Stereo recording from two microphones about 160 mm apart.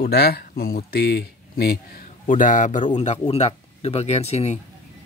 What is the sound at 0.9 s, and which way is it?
Speech, 90° left.